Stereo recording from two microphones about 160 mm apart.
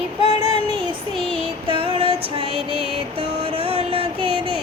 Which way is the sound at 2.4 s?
35° left (ahead or behind).